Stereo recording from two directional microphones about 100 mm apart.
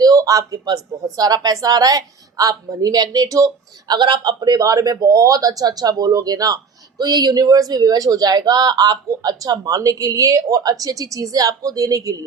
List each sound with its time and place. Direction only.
0.0 s speech: 40° right (ahead or behind)